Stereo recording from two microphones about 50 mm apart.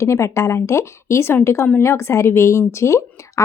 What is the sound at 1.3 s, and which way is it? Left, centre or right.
A woman's voice, left.